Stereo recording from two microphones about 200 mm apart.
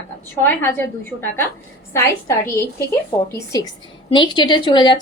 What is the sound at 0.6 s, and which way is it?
A woman's voice, 10° left (ahead or behind).